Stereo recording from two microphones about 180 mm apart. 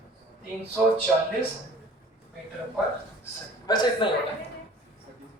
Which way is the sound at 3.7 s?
25° left (ahead or behind).